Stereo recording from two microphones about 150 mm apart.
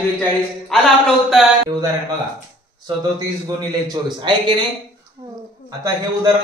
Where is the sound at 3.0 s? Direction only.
25° right (ahead or behind).